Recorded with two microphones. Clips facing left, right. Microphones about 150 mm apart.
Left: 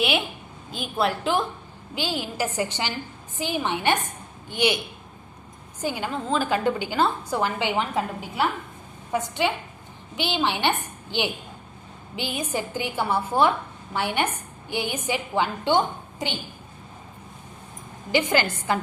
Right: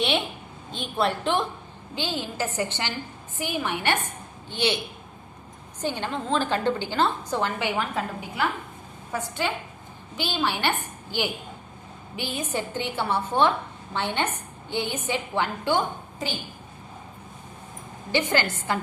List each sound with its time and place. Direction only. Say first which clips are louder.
0.7 s a woman's voice: left 1 dB; 5° left (ahead or behind)
2.0 s a woman's voice: left 2 dB; 15° left (ahead or behind)
5.8 s a woman's voice: left 1 dB; 10° left (ahead or behind)
18.1 s a woman's voice: left 2 dB; 15° left (ahead or behind)